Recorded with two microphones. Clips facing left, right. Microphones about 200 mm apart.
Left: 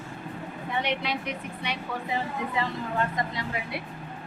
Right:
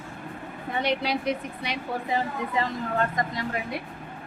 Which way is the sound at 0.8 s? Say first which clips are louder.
Right 4 dB; 35° right (ahead or behind).